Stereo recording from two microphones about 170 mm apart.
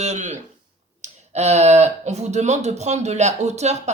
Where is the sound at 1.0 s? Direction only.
40° right (ahead or behind).